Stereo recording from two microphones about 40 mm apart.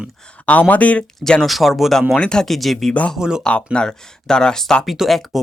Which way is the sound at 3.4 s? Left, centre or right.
Left.